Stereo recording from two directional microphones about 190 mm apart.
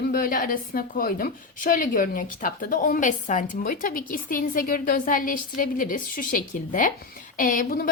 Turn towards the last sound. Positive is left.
turn(degrees=45)  # may be behind; listen again after turning